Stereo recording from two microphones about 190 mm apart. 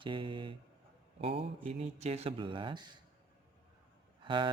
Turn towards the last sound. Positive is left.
turn(degrees=-25)  # may be behind; listen again after turning